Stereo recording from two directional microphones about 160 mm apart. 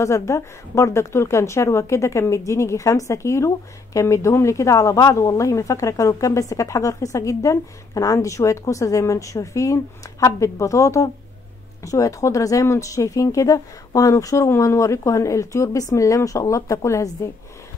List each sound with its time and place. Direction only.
0.0 s a woman's voice: 20° left (ahead or behind)